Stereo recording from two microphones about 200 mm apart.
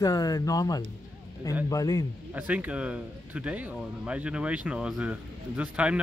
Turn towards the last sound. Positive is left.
turn(degrees=-5)  # may be behind; listen again after turning